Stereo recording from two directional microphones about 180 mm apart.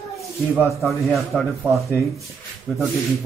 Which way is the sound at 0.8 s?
Centre (ahead or behind).